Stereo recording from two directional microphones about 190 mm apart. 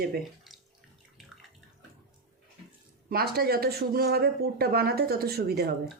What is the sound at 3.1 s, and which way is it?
Speech, 55° right (ahead or behind).